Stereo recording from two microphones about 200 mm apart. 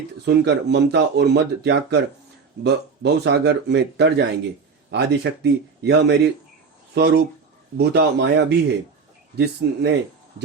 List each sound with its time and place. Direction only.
0.3 s speech: 55° right (ahead or behind)